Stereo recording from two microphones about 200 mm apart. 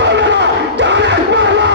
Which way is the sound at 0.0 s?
60° right (ahead or behind).